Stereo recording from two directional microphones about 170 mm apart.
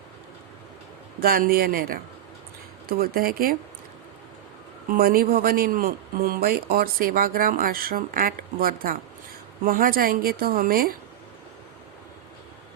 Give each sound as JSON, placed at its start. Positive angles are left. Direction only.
{"t": 1.2, "sound": "a man's voice", "side_deg": -60}
{"t": 3.0, "sound": "a man's voice", "side_deg": -60}
{"t": 4.9, "sound": "a man's voice", "side_deg": -60}